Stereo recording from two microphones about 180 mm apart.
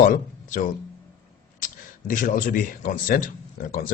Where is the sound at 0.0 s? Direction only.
50° left (ahead or behind).